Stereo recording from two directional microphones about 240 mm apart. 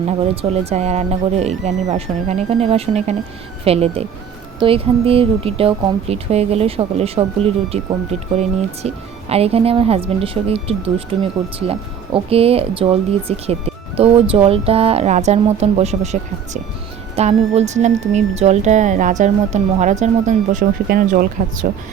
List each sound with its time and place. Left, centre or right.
0.6 s speech: right
8.8 s speech: right
17.2 s speech: right